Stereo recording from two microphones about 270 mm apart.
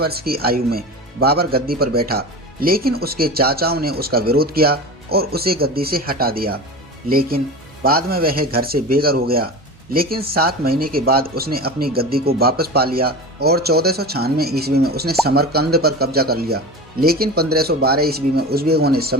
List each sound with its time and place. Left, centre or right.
0.0 s speech: right